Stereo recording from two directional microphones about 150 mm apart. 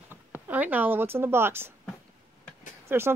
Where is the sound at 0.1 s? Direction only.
10° right (ahead or behind).